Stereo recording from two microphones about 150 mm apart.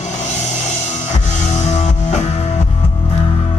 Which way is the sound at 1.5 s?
50° left (ahead or behind).